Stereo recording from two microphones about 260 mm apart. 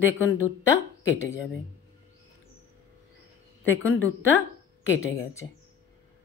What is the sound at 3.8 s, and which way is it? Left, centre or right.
A woman's voice, centre.